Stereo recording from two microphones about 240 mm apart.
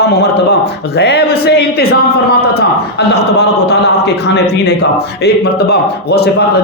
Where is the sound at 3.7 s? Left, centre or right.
Left.